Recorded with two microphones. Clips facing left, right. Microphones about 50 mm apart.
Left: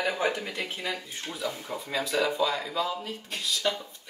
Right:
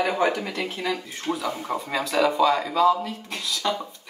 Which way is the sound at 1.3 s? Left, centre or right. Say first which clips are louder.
Right 7 dB; right.